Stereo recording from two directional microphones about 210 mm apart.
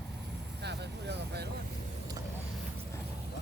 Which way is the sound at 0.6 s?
55° right (ahead or behind).